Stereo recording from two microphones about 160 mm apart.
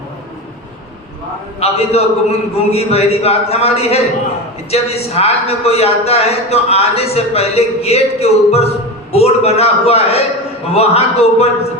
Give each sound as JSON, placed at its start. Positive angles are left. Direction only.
{"t": 1.5, "sound": "a man's voice", "side_deg": 40}